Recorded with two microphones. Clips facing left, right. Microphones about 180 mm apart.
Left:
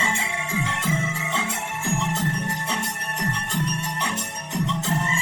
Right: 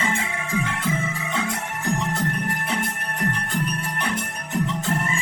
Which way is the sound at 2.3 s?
25° left (ahead or behind).